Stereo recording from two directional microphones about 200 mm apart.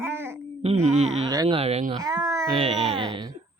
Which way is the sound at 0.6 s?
30° right (ahead or behind).